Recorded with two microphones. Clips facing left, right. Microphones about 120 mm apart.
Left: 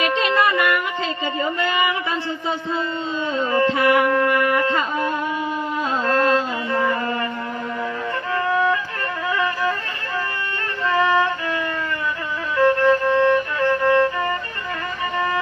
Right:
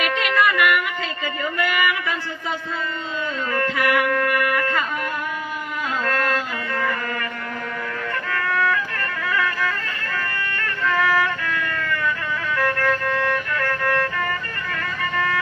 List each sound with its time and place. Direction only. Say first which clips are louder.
0.0 s music: left 2 dB; 25° left (ahead or behind)
1.4 s a sound: left 1 dB; 25° left (ahead or behind)
3.3 s speech: left 6 dB; 25° left (ahead or behind)
6.1 s music: left 6 dB; 25° left (ahead or behind)
8.3 s music: left 3 dB; 25° left (ahead or behind)
9.3 s violin: left 2 dB; 25° left (ahead or behind)
10.8 s violin: left 2 dB; 25° left (ahead or behind)